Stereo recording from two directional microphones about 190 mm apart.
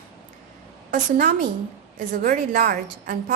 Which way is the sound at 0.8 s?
45° right (ahead or behind).